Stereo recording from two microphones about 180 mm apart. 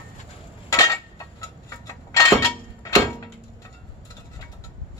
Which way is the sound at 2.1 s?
20° left (ahead or behind).